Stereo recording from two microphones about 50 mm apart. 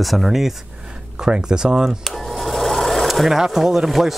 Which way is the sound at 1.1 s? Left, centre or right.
Centre.